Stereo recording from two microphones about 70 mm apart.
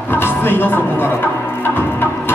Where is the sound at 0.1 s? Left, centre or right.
Left.